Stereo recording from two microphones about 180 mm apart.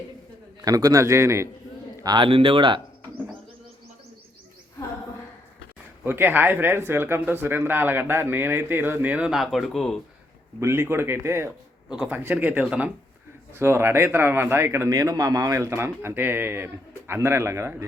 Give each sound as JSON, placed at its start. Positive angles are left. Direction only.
{"t": 0.6, "sound": "speech", "side_deg": -20}
{"t": 2.0, "sound": "speech", "side_deg": -25}
{"t": 6.1, "sound": "speech", "side_deg": -10}
{"t": 10.6, "sound": "speech", "side_deg": -15}